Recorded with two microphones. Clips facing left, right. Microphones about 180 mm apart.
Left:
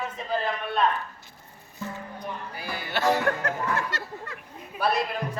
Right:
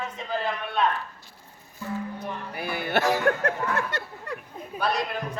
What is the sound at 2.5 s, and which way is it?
Music, 60° right (ahead or behind).